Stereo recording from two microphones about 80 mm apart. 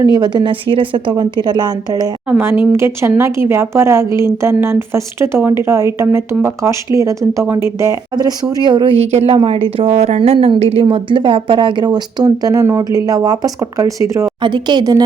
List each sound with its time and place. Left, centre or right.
0.0 s speech: right
1.1 s a woman's voice: right
2.4 s a woman's voice: right
8.1 s a woman's voice: right
12.6 s a woman's voice: right
13.1 s speech: right
14.4 s speech: right